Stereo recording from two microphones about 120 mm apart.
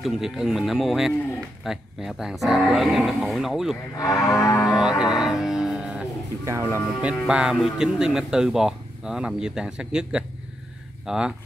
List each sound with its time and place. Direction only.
0.0 s a man's voice: centre (ahead or behind)
3.9 s music: 30° left (ahead or behind)
4.7 s music: 5° right (ahead or behind)
6.4 s speech: 25° right (ahead or behind)
7.0 s a man's voice: 10° right (ahead or behind)